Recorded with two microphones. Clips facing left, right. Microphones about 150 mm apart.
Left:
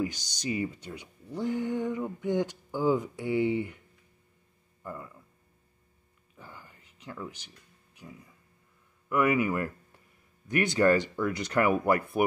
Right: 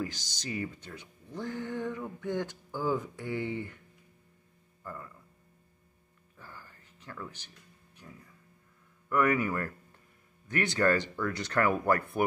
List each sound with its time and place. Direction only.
0.0 s speech: 15° left (ahead or behind)
4.8 s a sound: 15° left (ahead or behind)
6.3 s music: 15° left (ahead or behind)
9.1 s speech: 10° left (ahead or behind)